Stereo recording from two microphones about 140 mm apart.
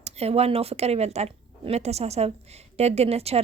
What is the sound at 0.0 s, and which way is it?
Speech, 50° right (ahead or behind).